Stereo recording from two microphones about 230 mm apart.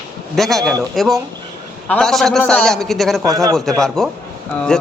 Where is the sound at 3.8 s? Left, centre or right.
Centre.